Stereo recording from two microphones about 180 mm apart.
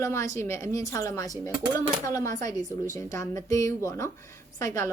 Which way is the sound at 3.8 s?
15° left (ahead or behind).